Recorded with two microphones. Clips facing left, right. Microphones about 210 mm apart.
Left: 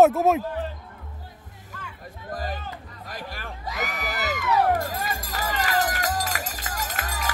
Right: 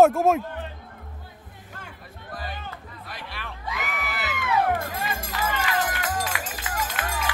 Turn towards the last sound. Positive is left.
turn(degrees=40)  # may be behind; listen again after turning